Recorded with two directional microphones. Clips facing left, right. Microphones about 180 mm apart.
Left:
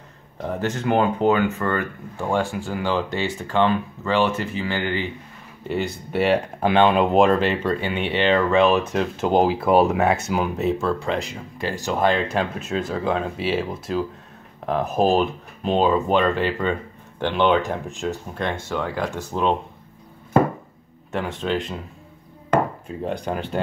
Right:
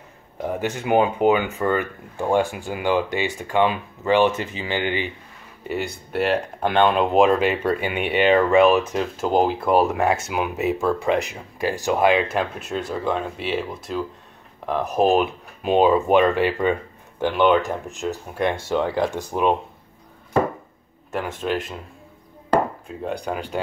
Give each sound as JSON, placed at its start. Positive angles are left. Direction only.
{"t": 0.4, "sound": "speech", "side_deg": -15}
{"t": 5.7, "sound": "speech", "side_deg": 0}
{"t": 14.7, "sound": "speech", "side_deg": 0}
{"t": 18.7, "sound": "speech", "side_deg": -15}
{"t": 21.1, "sound": "speech", "side_deg": -5}
{"t": 23.1, "sound": "speech", "side_deg": -10}